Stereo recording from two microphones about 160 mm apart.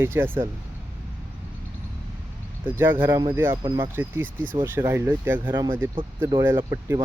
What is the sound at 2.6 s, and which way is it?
Speech, 15° right (ahead or behind).